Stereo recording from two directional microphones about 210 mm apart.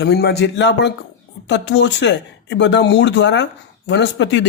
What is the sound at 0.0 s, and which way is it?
A man's voice, 50° left (ahead or behind).